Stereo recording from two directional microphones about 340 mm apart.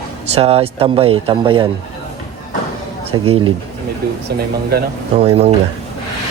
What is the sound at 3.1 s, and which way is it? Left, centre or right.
Speech, centre.